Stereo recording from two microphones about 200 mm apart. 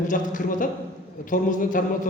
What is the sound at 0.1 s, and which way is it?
Speech, 40° left (ahead or behind).